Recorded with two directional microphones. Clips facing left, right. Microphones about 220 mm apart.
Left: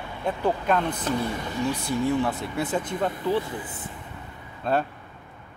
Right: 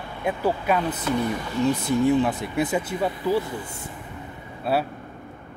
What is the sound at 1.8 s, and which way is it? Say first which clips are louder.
Speech: right 3 dB; 20° right (ahead or behind).